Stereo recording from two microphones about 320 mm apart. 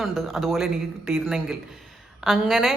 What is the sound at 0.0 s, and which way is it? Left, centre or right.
A woman's voice, centre.